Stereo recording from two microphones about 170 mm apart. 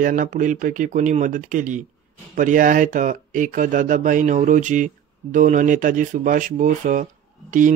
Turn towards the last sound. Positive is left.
turn(degrees=-50)  # may be behind; listen again after turning